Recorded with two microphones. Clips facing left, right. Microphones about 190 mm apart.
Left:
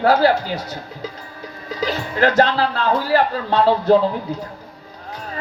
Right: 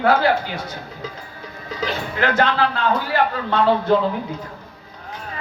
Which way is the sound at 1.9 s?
35° left (ahead or behind).